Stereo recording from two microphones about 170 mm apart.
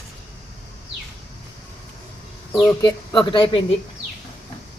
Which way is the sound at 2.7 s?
25° left (ahead or behind).